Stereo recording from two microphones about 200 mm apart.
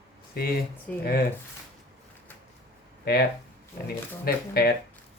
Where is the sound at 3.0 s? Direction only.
50° left (ahead or behind).